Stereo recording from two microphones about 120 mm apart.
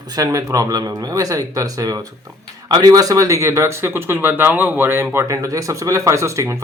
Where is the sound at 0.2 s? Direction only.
30° right (ahead or behind).